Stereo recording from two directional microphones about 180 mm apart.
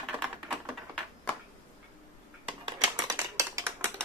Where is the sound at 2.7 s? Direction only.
20° right (ahead or behind).